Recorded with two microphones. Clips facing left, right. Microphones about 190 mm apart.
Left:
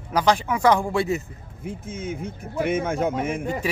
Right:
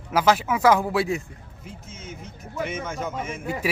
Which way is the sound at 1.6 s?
55° left (ahead or behind).